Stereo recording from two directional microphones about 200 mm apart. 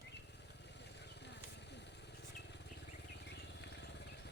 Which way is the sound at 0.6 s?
60° left (ahead or behind).